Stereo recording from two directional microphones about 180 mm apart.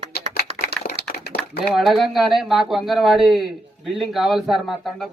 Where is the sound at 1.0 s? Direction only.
65° left (ahead or behind).